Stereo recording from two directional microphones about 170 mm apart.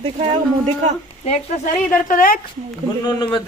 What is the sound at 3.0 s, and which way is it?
Speech, 25° left (ahead or behind).